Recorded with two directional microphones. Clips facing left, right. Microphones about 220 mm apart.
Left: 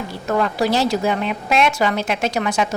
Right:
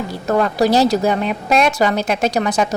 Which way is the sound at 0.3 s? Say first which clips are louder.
Right 4 dB; 40° right (ahead or behind).